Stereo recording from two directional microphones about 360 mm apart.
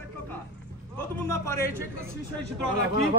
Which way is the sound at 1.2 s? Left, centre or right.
Centre.